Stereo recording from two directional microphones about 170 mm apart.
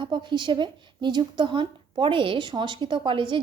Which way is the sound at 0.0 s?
25° right (ahead or behind).